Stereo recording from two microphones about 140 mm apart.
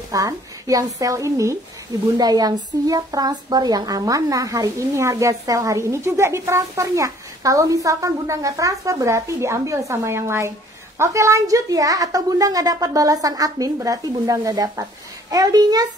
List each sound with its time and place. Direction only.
0.1 s a woman's voice: 25° right (ahead or behind)